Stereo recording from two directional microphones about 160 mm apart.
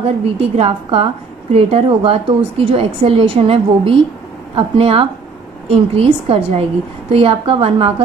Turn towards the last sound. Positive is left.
turn(degrees=-35)  # may be behind; listen again after turning